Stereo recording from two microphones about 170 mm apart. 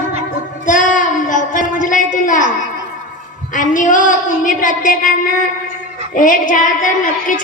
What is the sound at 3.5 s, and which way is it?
A woman's voice, 50° left (ahead or behind).